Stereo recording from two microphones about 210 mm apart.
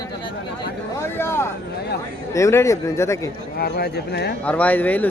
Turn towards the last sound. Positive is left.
turn(degrees=10)  # may be behind; listen again after turning